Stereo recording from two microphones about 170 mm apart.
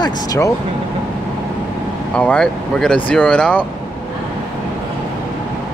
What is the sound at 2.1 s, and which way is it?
Speech, 5° left (ahead or behind).